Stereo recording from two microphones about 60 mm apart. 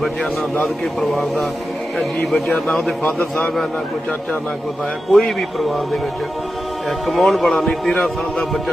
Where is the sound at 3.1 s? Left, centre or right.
Left.